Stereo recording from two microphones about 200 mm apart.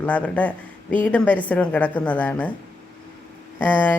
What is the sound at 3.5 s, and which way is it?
Speech, 10° left (ahead or behind).